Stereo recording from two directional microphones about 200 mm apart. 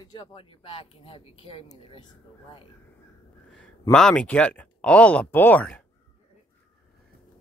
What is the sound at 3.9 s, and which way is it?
Speech, 5° left (ahead or behind).